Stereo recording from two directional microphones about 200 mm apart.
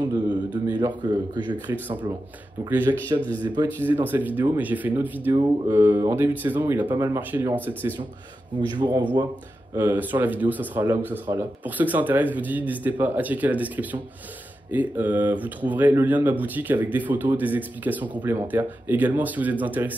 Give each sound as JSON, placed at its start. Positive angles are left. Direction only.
{"t": 0.0, "sound": "a sound", "side_deg": -20}
{"t": 0.7, "sound": "speech", "side_deg": -20}
{"t": 1.7, "sound": "speech", "side_deg": -10}
{"t": 8.5, "sound": "speech", "side_deg": -20}
{"t": 9.8, "sound": "speech", "side_deg": -10}